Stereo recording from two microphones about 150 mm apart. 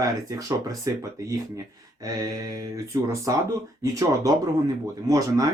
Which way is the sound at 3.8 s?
20° right (ahead or behind).